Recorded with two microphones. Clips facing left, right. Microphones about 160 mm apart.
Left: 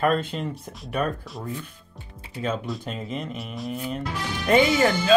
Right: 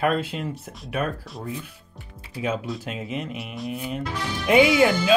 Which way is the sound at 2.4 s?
5° right (ahead or behind).